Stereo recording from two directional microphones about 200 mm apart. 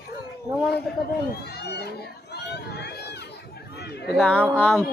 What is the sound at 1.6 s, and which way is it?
Crowd, 55° left (ahead or behind).